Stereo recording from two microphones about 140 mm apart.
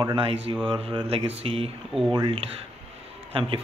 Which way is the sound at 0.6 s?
40° right (ahead or behind).